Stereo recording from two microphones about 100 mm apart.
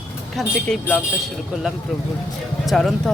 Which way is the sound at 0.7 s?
5° left (ahead or behind).